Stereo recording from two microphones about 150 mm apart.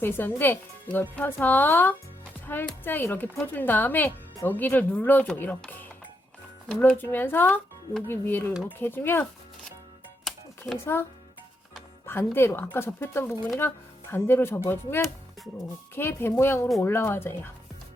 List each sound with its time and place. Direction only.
0.0 s speech: 15° left (ahead or behind)
10.8 s speech: 15° left (ahead or behind)
12.0 s speech: 15° left (ahead or behind)